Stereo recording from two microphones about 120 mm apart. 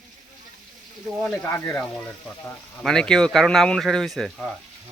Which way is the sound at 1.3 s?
20° left (ahead or behind).